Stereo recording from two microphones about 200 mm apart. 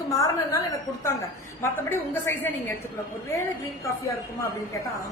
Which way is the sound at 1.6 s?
10° left (ahead or behind).